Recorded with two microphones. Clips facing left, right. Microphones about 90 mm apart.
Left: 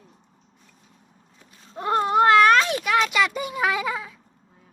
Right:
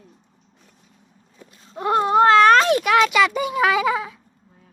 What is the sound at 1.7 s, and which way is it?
Babbling, 20° right (ahead or behind).